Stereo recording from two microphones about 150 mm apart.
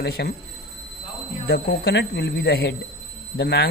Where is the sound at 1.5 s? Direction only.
90° left.